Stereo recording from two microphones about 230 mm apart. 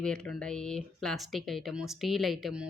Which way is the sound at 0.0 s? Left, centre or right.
Centre.